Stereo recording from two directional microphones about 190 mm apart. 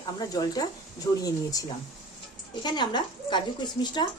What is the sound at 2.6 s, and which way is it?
Speech, 25° left (ahead or behind).